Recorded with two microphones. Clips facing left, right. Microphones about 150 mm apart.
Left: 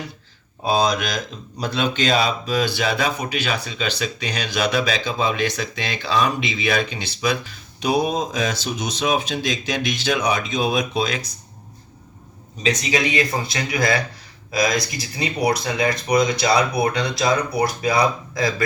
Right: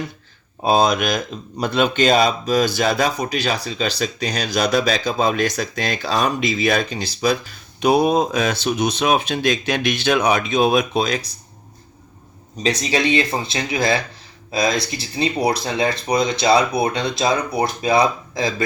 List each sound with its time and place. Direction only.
0.6 s speech: 55° right (ahead or behind); by 7.3 s 35° right (ahead or behind)
7.8 s speech: 60° right (ahead or behind)
12.6 s speech: 35° right (ahead or behind)